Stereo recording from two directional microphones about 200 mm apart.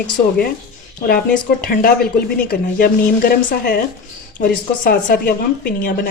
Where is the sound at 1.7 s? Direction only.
45° left (ahead or behind).